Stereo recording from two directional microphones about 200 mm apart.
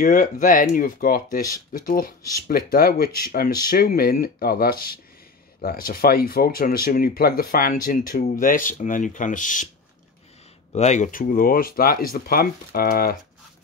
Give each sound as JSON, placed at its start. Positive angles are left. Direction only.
{"t": 0.0, "sound": "speech", "side_deg": 40}
{"t": 10.7, "sound": "speech", "side_deg": 35}